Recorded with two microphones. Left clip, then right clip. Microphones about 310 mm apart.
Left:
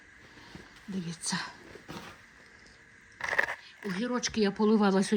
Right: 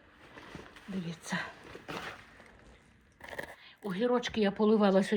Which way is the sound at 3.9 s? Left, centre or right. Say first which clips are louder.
Right 3 dB; centre.